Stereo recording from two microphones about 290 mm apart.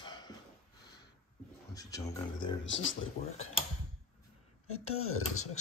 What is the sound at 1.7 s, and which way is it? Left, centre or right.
Speech, centre.